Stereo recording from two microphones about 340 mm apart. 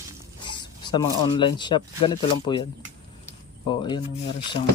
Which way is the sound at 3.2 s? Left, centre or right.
Centre.